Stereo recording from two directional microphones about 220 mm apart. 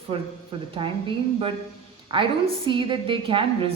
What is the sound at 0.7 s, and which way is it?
A woman's voice, 25° right (ahead or behind).